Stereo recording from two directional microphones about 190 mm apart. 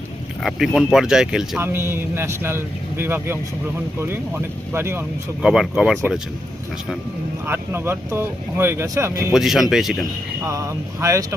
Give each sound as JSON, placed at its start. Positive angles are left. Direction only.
{"t": 0.4, "sound": "speech", "side_deg": 0}
{"t": 7.4, "sound": "speech", "side_deg": -10}
{"t": 9.3, "sound": "speech", "side_deg": 0}
{"t": 10.4, "sound": "speech", "side_deg": -15}